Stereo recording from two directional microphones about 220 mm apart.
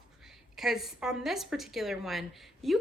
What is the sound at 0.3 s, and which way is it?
Speech, centre (ahead or behind).